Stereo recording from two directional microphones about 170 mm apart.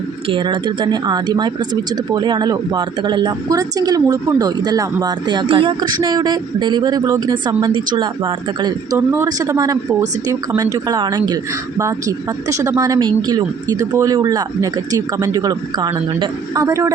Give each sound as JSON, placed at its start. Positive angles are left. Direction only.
{"t": 0.3, "sound": "speech", "side_deg": -30}